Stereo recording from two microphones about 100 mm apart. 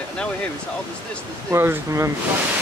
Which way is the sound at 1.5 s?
25° right (ahead or behind).